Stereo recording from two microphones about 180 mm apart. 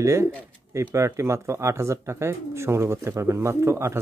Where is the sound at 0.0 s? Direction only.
15° right (ahead or behind).